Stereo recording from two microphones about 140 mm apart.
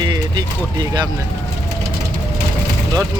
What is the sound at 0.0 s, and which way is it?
Speech, 30° right (ahead or behind).